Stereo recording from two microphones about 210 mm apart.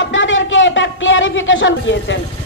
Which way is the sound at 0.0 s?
65° left (ahead or behind).